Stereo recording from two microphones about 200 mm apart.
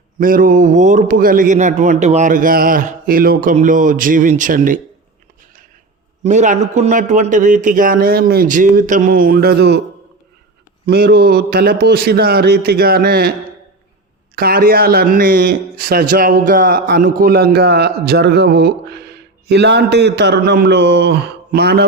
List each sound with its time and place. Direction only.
0.2 s a man's voice: 45° right (ahead or behind)
6.2 s a man's voice: 35° right (ahead or behind); by 9.8 s 55° right (ahead or behind)
10.8 s speech: 50° right (ahead or behind)
14.3 s speech: 50° right (ahead or behind)